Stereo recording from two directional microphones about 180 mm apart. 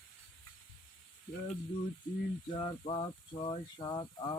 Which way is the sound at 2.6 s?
30° left (ahead or behind).